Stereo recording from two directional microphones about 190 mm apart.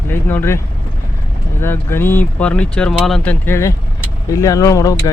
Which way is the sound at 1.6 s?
10° left (ahead or behind).